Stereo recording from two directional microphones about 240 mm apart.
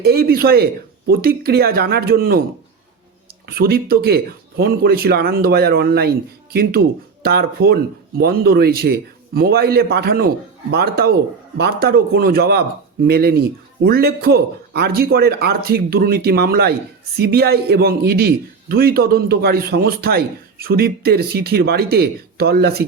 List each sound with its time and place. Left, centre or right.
0.0 s a man's voice: right
3.4 s a man's voice: right